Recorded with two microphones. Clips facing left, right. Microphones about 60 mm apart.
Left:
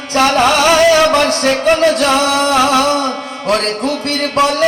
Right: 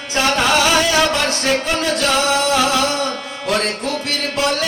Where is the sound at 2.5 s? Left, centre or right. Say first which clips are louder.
Left 5 dB; left.